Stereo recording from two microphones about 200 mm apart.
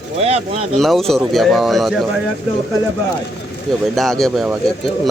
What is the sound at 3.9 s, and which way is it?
Speech, centre (ahead or behind).